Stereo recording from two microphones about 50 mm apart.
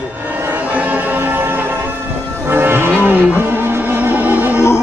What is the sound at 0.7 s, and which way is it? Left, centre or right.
Music, right.